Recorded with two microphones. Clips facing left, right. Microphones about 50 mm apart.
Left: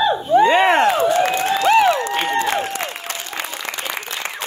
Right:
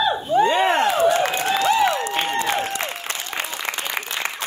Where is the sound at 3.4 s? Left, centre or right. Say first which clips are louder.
Right 1 dB; right.